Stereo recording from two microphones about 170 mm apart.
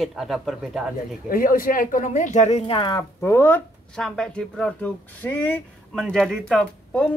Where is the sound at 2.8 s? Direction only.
25° left (ahead or behind).